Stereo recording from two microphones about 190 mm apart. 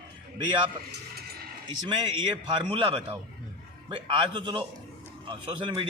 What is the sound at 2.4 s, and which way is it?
A man's voice, 25° right (ahead or behind).